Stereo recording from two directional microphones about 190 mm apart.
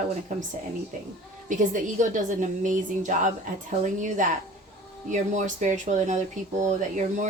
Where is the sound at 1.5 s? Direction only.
40° right (ahead or behind).